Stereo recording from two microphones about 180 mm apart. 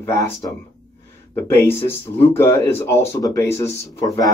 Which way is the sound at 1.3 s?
15° left (ahead or behind).